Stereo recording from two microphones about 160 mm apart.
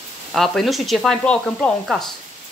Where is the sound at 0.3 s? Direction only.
Centre (ahead or behind).